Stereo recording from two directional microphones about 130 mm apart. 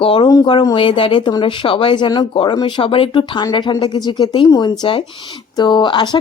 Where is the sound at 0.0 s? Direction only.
40° left (ahead or behind).